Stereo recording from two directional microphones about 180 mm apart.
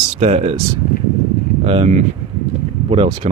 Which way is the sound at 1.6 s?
35° right (ahead or behind).